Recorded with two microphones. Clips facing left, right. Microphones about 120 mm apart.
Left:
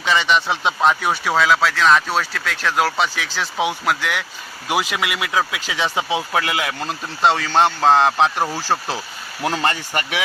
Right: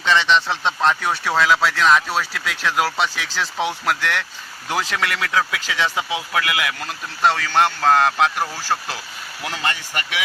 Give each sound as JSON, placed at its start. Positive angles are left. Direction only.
{"t": 0.0, "sound": "speech", "side_deg": 5}